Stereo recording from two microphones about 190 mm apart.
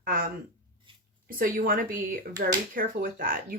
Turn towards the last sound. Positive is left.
turn(degrees=-45)  # may be behind; listen again after turning